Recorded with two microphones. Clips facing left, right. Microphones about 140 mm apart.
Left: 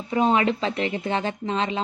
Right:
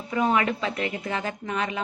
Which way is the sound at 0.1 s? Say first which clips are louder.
Left 3 dB; 25° left (ahead or behind).